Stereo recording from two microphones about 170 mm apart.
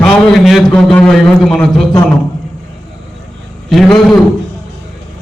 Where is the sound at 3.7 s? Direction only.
Centre (ahead or behind).